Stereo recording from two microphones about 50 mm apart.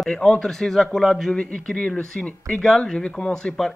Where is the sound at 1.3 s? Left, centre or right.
Centre.